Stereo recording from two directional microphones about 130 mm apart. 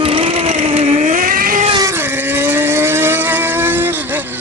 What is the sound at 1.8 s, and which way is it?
Vehicle, 20° right (ahead or behind).